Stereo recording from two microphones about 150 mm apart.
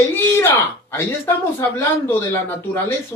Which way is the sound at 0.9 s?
15° left (ahead or behind).